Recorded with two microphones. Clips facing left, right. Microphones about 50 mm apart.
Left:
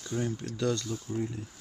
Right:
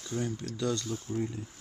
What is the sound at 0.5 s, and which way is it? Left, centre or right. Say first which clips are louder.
Speech: left 2 dB; centre.